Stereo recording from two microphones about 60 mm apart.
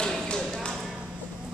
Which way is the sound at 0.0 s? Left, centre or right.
Centre.